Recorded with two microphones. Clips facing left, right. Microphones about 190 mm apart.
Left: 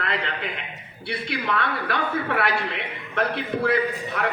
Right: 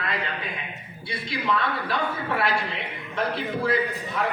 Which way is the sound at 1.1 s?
60° left (ahead or behind).